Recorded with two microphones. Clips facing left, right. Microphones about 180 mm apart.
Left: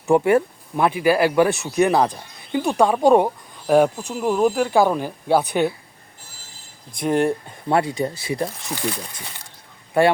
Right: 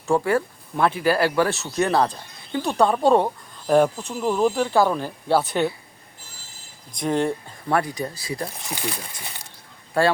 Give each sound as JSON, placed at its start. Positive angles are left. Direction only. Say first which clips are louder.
{"t": 0.1, "sound": "speech", "louder": "left 5 dB", "side_deg": 20}
{"t": 7.0, "sound": "speech", "louder": "left 3 dB", "side_deg": 15}
{"t": 7.8, "sound": "speech", "louder": "left 4 dB", "side_deg": 25}